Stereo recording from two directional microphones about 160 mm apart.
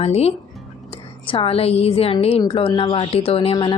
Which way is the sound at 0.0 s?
40° left (ahead or behind).